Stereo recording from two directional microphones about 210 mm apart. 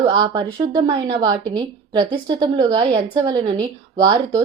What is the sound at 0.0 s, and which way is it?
A woman's voice, 20° right (ahead or behind).